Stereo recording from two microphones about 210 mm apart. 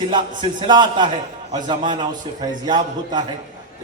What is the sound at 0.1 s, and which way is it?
A man's voice, 20° right (ahead or behind).